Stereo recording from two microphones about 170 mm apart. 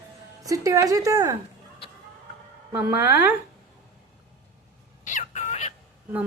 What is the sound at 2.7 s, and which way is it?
Speech, 10° right (ahead or behind).